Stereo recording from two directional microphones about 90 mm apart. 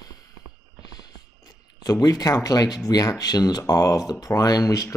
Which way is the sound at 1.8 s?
45° left (ahead or behind).